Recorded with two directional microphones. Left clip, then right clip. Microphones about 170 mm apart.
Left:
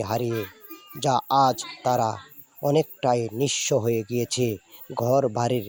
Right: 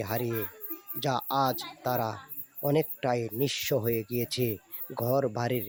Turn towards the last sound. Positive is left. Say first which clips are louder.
# left 6 dB
turn(degrees=25)  # may be behind; listen again after turning